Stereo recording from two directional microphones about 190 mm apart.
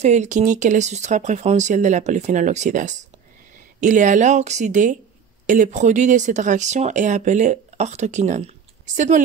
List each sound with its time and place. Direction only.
0.0 s speech: 40° right (ahead or behind)